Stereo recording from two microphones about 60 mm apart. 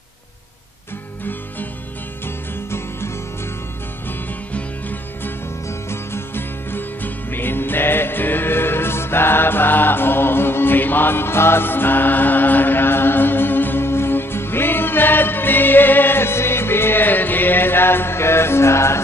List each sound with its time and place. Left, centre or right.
2.2 s music: left
4.5 s music: left
5.7 s music: left